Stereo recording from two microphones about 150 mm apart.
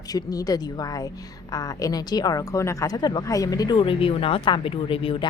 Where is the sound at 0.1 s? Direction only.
25° left (ahead or behind).